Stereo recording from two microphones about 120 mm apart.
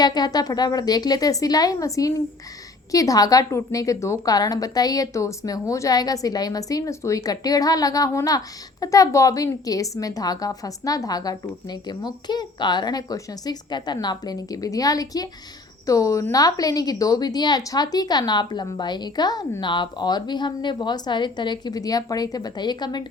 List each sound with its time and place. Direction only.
0.0 s a woman's voice: 35° left (ahead or behind)